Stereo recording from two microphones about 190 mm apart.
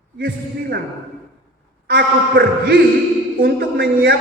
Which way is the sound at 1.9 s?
50° right (ahead or behind).